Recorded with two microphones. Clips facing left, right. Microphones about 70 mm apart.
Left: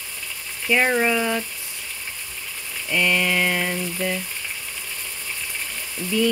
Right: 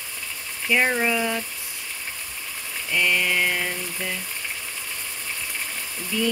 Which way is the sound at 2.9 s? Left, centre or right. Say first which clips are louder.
Left 2 dB; centre.